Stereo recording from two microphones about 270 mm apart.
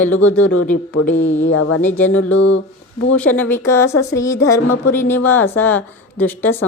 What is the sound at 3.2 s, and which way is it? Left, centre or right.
Speech, centre.